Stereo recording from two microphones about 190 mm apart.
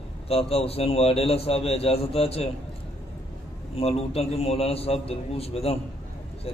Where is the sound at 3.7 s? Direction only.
30° left (ahead or behind).